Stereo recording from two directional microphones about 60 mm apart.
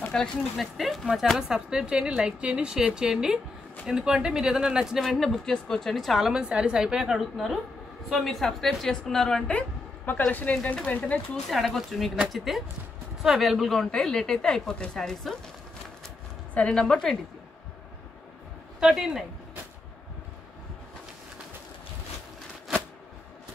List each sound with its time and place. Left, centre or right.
0.1 s a woman's voice: centre
1.7 s a woman's voice: centre
5.0 s a woman's voice: centre
6.4 s a woman's voice: centre; by 11.1 s left
11.4 s a woman's voice: centre
16.5 s a woman's voice: centre
18.8 s a woman's voice: centre